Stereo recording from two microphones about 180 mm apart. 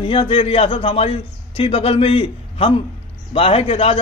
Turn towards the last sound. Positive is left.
turn(degrees=35)  # may be behind; listen again after turning